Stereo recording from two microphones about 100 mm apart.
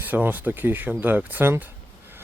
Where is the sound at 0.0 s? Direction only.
15° right (ahead or behind).